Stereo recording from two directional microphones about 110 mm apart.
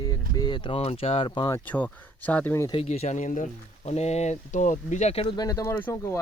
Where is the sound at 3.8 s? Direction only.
80° left.